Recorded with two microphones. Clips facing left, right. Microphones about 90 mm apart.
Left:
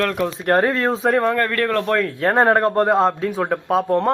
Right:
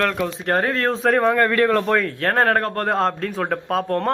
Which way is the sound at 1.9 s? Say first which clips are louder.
Left 1 dB; centre (ahead or behind).